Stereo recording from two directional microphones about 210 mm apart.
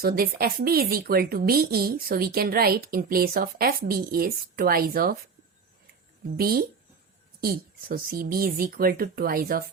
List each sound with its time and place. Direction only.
0.0 s a woman's voice: 45° right (ahead or behind)
6.3 s a woman's voice: 45° right (ahead or behind)